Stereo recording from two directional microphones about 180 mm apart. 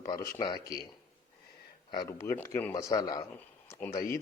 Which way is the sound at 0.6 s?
60° left (ahead or behind).